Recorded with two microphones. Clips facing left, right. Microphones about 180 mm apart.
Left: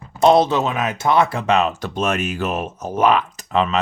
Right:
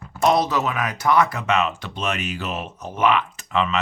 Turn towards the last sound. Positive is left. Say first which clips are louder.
# left 3 dB
turn(degrees=35)  # may be behind; listen again after turning